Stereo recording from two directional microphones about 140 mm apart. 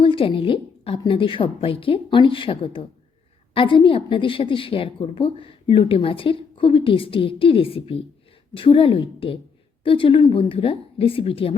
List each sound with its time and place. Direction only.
0.0 s a woman's voice: 40° left (ahead or behind)